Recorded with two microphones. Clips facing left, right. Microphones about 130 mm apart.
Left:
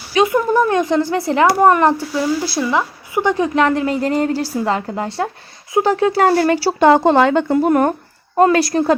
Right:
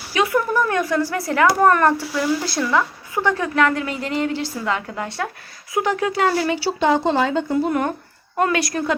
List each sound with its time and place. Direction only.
0.1 s a woman's voice: 20° left (ahead or behind); by 7.9 s 45° left (ahead or behind)
8.4 s a woman's voice: 30° left (ahead or behind)